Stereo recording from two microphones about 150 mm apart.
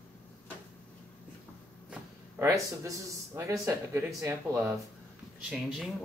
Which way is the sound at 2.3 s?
20° right (ahead or behind).